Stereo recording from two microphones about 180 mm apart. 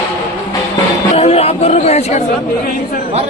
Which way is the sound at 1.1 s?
35° left (ahead or behind).